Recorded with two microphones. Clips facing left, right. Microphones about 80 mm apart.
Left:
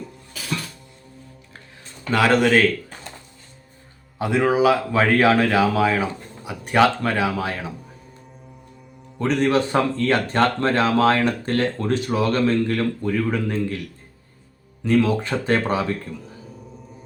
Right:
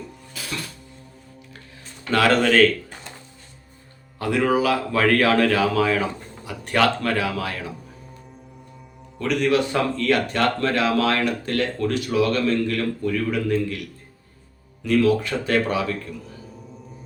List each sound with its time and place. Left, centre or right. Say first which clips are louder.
2.0 s speech: left 1 dB; centre
4.2 s a man's voice: left 2 dB; centre
9.1 s a man's voice: left 1 dB; left
14.8 s speech: even; left